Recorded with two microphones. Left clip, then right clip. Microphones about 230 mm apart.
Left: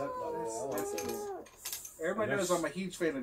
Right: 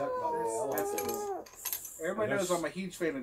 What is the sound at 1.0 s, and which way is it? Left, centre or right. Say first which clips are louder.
Speech: right 3 dB; right.